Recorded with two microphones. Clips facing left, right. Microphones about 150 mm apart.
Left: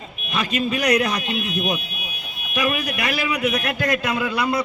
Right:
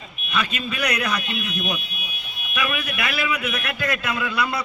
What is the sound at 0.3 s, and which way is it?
A man's voice, 45° left (ahead or behind).